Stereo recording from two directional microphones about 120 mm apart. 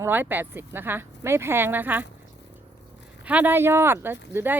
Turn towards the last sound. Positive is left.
turn(degrees=-15)  # may be behind; listen again after turning